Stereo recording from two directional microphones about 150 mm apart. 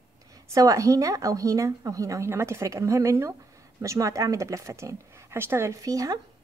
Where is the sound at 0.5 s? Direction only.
20° right (ahead or behind).